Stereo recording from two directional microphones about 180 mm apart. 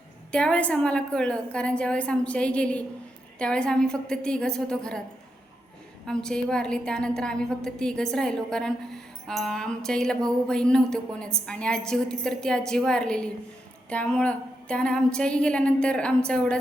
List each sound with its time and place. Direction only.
0.3 s speech: 5° left (ahead or behind)
6.1 s speech: 5° left (ahead or behind)